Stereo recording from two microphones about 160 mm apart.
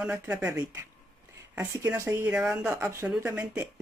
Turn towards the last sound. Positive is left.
turn(degrees=-10)  # may be behind; listen again after turning